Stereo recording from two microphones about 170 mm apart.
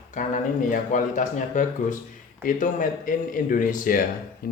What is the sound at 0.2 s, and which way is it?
Speech, 45° left (ahead or behind).